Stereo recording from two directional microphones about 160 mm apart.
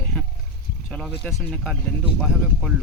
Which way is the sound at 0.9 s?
5° left (ahead or behind).